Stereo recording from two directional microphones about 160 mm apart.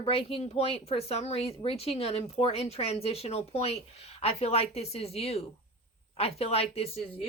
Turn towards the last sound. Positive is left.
turn(degrees=40)  # may be behind; listen again after turning